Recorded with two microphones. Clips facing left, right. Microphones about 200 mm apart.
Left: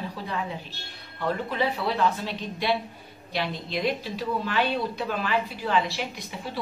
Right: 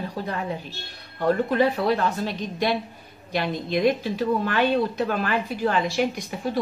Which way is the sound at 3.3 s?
50° right (ahead or behind).